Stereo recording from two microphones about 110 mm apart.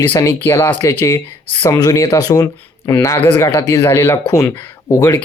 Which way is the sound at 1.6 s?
35° left (ahead or behind).